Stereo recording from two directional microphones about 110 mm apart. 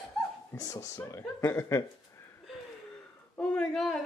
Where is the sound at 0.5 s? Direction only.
30° left (ahead or behind).